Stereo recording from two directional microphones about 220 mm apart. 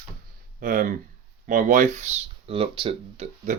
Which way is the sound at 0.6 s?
40° right (ahead or behind).